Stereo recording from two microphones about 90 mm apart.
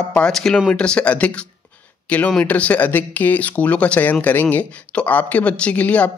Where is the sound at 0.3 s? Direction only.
5° left (ahead or behind).